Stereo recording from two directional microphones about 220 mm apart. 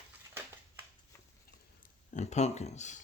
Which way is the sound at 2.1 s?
30° left (ahead or behind).